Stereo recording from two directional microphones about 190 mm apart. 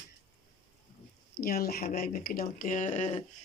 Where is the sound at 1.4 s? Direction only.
55° left (ahead or behind); by 3.2 s 35° left (ahead or behind).